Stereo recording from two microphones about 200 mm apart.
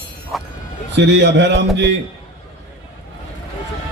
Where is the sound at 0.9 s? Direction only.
60° right (ahead or behind).